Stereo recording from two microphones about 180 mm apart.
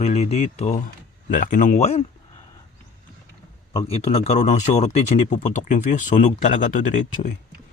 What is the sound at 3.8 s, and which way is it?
Speech, 35° left (ahead or behind).